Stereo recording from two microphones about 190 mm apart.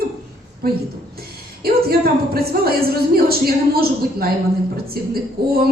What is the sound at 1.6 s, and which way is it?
Speech, 55° right (ahead or behind).